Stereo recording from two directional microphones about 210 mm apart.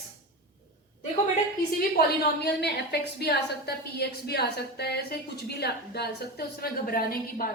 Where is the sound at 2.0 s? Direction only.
50° left (ahead or behind).